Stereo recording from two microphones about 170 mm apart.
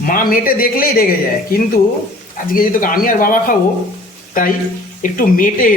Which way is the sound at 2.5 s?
55° left (ahead or behind).